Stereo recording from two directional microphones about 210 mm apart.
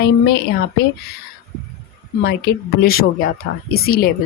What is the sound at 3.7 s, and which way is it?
Speech, 45° left (ahead or behind).